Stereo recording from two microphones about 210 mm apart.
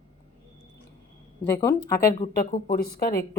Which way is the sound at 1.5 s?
10° left (ahead or behind).